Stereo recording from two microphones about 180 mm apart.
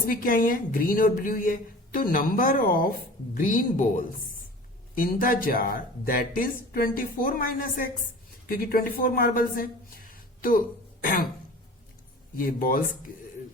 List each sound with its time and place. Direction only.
0.1 s speech: 50° left (ahead or behind)
10.1 s a sound: 50° left (ahead or behind)
11.0 s throat clearing: 50° left (ahead or behind)
12.4 s speech: 50° left (ahead or behind)